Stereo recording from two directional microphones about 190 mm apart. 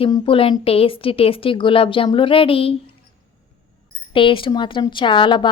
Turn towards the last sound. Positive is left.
turn(degrees=25)  # may be behind; listen again after turning